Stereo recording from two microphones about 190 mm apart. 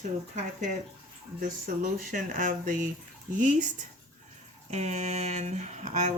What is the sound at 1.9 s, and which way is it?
Speech, 45° right (ahead or behind).